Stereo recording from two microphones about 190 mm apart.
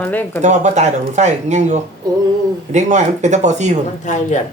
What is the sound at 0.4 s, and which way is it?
Speech, 40° right (ahead or behind).